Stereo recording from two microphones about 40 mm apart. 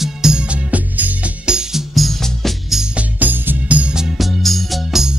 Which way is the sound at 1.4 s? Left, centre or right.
Centre.